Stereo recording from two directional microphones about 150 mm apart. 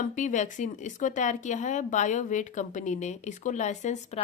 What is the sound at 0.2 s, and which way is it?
Speech, 55° left (ahead or behind).